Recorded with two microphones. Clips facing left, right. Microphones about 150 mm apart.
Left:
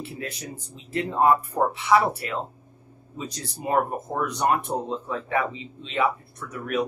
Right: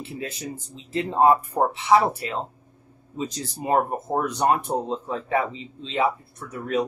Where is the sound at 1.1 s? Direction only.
25° right (ahead or behind).